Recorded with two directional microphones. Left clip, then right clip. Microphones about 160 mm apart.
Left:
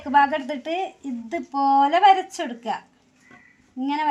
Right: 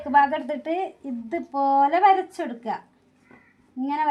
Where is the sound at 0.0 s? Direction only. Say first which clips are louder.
Left 1 dB; 25° right (ahead or behind).